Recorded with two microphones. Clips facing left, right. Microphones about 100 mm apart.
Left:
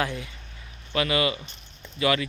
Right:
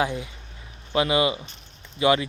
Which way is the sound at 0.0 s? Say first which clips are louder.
Right 3 dB; 20° right (ahead or behind).